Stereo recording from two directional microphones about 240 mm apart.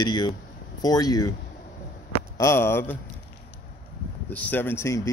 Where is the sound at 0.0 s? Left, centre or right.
Centre.